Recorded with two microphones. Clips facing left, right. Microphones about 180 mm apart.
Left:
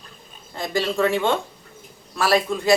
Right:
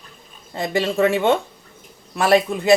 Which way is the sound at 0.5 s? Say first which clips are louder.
Right 3 dB; 20° right (ahead or behind).